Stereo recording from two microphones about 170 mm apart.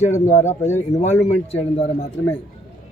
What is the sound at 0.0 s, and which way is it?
Speech, 40° left (ahead or behind).